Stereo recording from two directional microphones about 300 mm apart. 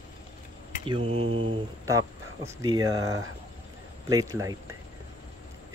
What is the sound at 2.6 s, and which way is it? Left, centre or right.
Speech, centre.